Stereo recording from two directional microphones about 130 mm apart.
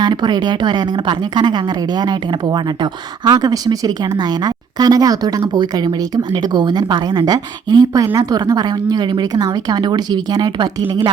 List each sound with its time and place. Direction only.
0.0 s a woman's voice: 35° right (ahead or behind)